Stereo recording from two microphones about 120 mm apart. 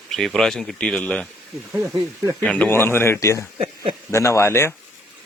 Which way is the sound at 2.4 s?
10° left (ahead or behind).